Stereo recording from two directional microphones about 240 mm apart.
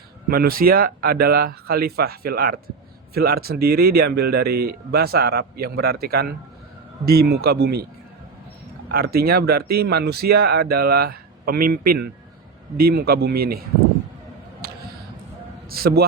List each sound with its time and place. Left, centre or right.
0.3 s speech: right
8.9 s speech: right
15.7 s a man's voice: right